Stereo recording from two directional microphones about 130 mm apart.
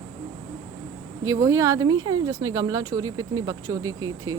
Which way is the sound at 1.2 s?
25° right (ahead or behind).